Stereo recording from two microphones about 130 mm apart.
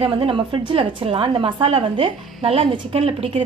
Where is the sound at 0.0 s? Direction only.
40° right (ahead or behind).